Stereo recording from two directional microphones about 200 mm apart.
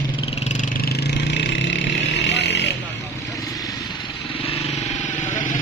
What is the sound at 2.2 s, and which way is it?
Chainsaw, 60° left (ahead or behind).